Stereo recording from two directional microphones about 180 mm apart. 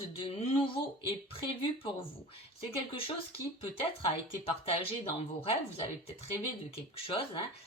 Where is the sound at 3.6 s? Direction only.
30° left (ahead or behind).